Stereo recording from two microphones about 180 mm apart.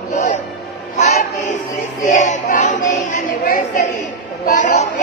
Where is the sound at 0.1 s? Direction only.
45° left (ahead or behind).